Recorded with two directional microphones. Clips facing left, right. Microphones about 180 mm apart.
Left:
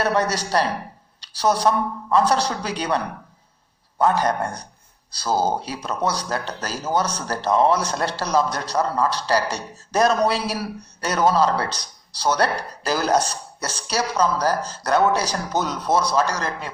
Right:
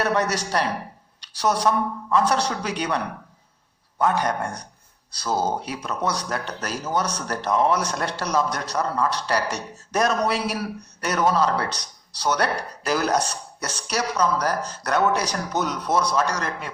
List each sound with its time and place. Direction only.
0.0 s speech: 35° left (ahead or behind)